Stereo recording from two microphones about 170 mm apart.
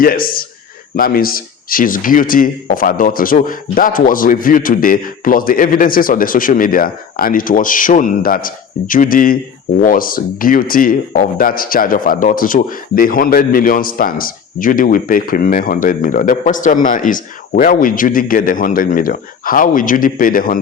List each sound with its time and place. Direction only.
0.0 s speech: 60° left (ahead or behind)